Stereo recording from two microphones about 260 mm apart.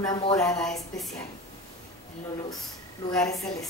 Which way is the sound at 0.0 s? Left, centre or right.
Centre.